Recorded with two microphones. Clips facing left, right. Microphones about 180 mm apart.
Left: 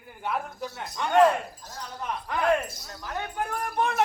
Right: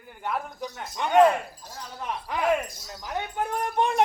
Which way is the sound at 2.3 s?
5° right (ahead or behind).